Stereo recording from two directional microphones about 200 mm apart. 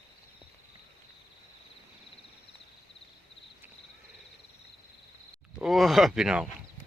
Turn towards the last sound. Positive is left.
turn(degrees=-5)  # may be behind; listen again after turning